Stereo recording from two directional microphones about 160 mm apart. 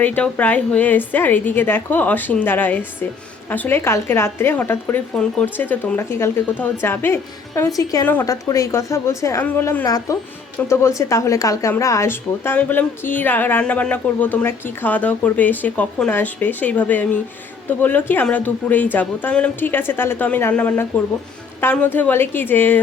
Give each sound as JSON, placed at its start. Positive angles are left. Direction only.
{"t": 0.0, "sound": "a woman's voice", "side_deg": 10}